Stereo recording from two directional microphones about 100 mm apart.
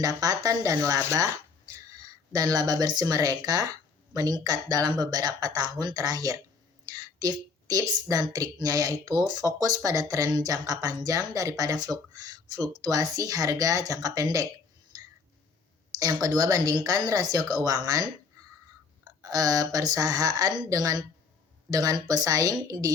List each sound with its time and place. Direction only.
0.0 s a woman's voice: 40° right (ahead or behind)
16.2 s speech: 40° right (ahead or behind)
19.2 s speech: 35° right (ahead or behind)